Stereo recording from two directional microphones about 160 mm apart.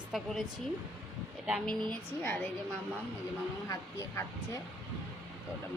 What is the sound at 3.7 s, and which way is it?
Speech, 20° left (ahead or behind).